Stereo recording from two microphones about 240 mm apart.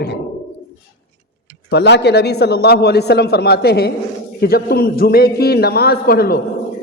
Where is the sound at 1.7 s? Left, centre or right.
Left.